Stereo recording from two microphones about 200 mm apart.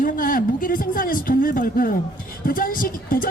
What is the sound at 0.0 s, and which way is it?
Speech, 45° left (ahead or behind).